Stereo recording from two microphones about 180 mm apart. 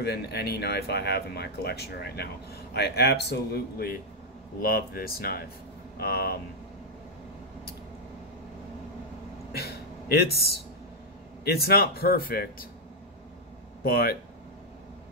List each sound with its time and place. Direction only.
0.0 s speech: 65° left (ahead or behind)
9.5 s a sound: 60° left (ahead or behind)
11.4 s speech: 60° left (ahead or behind)
13.8 s speech: 60° left (ahead or behind)